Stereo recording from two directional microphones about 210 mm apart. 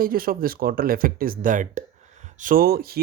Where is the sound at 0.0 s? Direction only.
45° right (ahead or behind).